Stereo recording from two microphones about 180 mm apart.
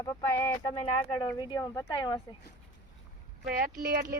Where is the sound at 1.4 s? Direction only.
25° left (ahead or behind).